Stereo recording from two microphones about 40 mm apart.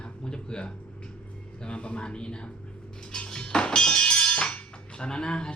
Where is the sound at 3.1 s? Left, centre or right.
Centre.